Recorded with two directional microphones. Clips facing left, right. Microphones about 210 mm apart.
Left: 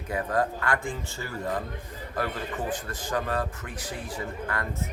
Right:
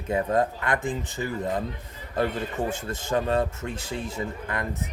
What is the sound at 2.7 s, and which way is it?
Speech, 25° right (ahead or behind).